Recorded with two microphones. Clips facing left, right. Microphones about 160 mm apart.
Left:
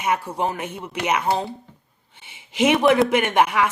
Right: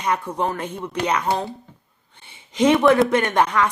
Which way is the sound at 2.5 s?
10° left (ahead or behind).